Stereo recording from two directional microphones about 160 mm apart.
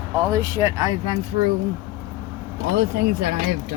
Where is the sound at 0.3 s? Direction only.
20° right (ahead or behind).